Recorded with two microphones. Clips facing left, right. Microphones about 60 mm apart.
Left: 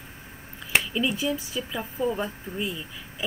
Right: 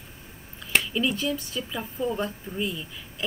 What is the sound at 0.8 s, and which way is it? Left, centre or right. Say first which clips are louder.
Speech: even; centre.